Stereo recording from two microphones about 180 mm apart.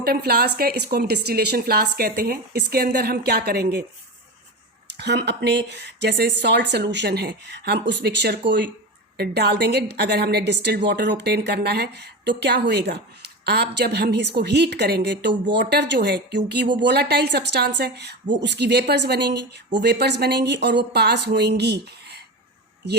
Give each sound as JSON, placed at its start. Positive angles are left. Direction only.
{"t": 0.0, "sound": "a woman's voice", "side_deg": -60}
{"t": 4.9, "sound": "a woman's voice", "side_deg": -70}